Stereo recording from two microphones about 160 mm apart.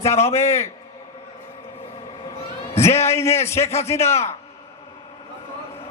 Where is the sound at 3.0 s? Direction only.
15° left (ahead or behind).